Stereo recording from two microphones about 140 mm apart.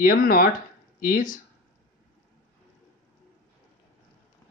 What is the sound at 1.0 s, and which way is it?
Speech, 75° left (ahead or behind).